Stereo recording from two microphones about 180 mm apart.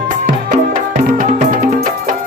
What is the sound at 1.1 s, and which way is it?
Music, 50° right (ahead or behind).